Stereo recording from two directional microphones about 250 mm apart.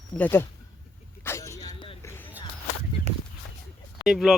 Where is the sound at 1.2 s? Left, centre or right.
Centre.